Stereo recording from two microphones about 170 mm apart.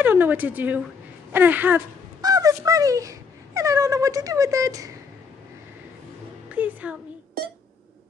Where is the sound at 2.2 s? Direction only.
20° right (ahead or behind).